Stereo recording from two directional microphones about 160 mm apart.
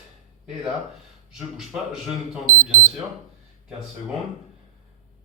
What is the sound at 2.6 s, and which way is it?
Speech, 50° right (ahead or behind).